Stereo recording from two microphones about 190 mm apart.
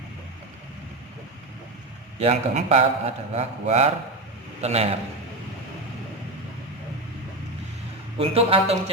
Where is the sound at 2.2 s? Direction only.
30° right (ahead or behind).